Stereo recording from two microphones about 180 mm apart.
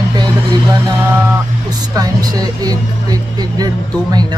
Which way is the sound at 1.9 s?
20° right (ahead or behind).